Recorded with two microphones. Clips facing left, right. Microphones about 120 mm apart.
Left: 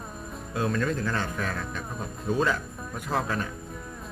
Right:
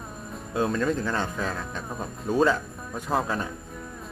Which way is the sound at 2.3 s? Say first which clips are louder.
Right 2 dB; 5° right (ahead or behind).